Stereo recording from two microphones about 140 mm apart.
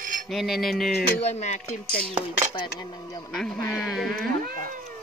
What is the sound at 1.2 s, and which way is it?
Speech, 55° left (ahead or behind).